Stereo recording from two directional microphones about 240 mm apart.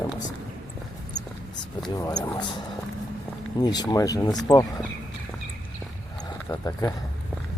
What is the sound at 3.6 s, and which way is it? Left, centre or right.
Speech, centre.